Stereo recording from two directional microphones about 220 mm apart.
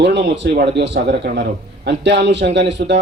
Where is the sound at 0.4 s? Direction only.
45° right (ahead or behind).